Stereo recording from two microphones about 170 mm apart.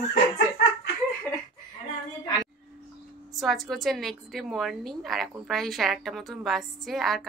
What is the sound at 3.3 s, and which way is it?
A woman's voice, centre (ahead or behind).